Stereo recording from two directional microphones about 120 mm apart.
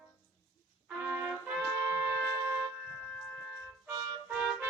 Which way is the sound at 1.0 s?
20° right (ahead or behind).